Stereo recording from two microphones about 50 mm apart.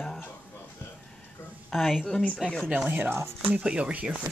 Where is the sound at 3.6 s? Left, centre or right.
Right.